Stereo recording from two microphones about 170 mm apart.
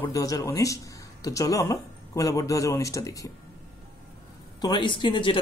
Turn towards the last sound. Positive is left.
turn(degrees=30)  # may be behind; listen again after turning